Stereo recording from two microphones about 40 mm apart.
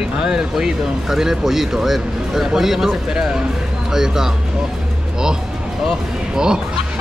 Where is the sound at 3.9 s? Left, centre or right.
Centre.